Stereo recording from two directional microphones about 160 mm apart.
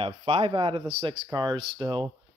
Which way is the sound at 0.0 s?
35° right (ahead or behind).